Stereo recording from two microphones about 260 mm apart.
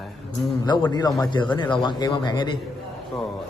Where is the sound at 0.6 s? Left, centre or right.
Centre.